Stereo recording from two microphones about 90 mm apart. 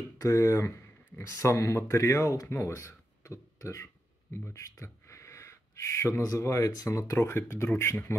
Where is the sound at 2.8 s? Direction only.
35° left (ahead or behind).